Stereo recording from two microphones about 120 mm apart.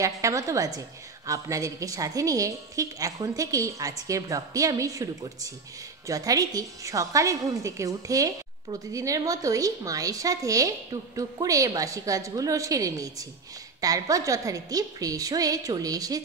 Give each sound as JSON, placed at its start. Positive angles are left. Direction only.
{"t": 0.0, "sound": "a woman's voice", "side_deg": -25}